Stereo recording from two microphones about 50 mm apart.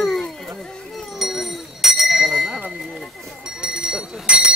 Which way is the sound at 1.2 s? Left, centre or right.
Centre.